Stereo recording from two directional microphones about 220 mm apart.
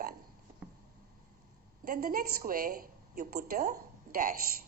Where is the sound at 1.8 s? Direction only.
40° right (ahead or behind).